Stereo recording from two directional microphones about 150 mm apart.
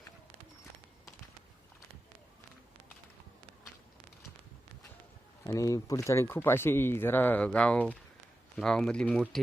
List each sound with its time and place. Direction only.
5.5 s speech: 20° left (ahead or behind); by 9.2 s 5° left (ahead or behind)